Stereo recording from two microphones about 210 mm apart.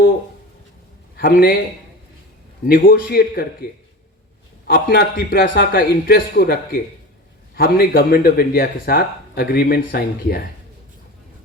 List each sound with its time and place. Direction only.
1.1 s a man's voice: 45° left (ahead or behind)
2.6 s a man's voice: 45° left (ahead or behind)